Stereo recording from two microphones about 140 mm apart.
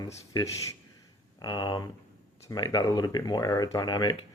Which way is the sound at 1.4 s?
30° left (ahead or behind).